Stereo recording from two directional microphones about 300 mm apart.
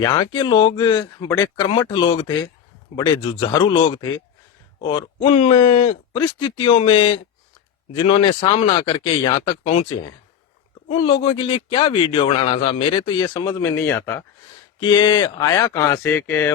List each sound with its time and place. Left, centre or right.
0.0 s speech: centre